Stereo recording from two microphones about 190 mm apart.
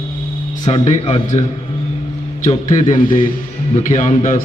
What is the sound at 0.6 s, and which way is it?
Speech, 30° left (ahead or behind).